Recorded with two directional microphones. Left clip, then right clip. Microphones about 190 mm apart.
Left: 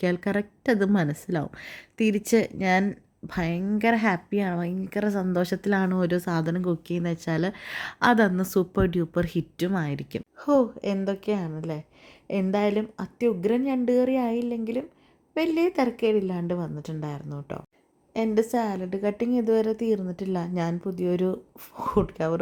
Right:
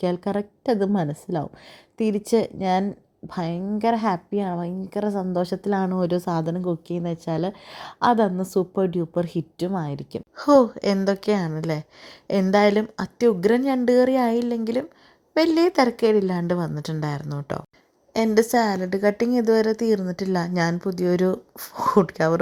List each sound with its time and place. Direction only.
0.0 s a woman's voice: 5° left (ahead or behind)
10.3 s a woman's voice: 15° right (ahead or behind)